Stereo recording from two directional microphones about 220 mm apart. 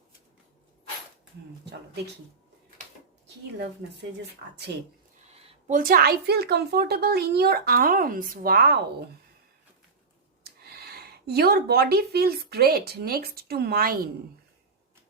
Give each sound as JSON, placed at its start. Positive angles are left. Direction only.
{"t": 5.4, "sound": "speech", "side_deg": -35}
{"t": 10.4, "sound": "speech", "side_deg": -45}